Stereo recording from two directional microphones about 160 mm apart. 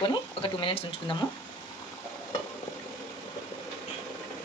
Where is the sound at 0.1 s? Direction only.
35° left (ahead or behind).